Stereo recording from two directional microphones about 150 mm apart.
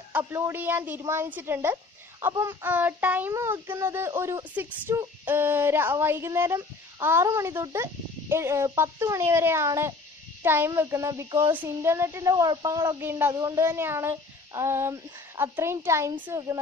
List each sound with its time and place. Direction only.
0.2 s female singing: 20° right (ahead or behind)